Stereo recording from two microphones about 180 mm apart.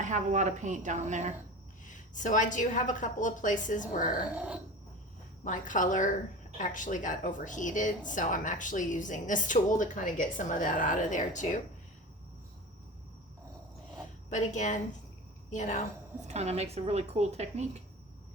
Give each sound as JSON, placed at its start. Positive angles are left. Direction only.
{"t": 0.0, "sound": "speech", "side_deg": -40}
{"t": 1.9, "sound": "speech", "side_deg": 45}
{"t": 4.4, "sound": "a sound", "side_deg": -5}
{"t": 5.4, "sound": "speech", "side_deg": 45}
{"t": 14.3, "sound": "speech", "side_deg": 40}
{"t": 16.2, "sound": "speech", "side_deg": -35}